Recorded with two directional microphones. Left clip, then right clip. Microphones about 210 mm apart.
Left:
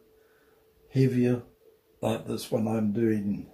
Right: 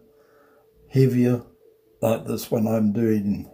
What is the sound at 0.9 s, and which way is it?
Speech, 50° right (ahead or behind).